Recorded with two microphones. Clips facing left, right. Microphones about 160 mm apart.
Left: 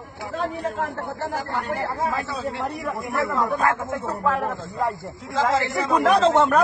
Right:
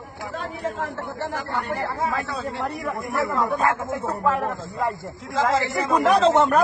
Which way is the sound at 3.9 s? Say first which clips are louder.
Right 1 dB; 15° right (ahead or behind).